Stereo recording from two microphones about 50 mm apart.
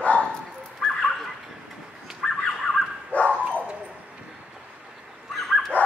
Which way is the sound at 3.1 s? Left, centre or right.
Left.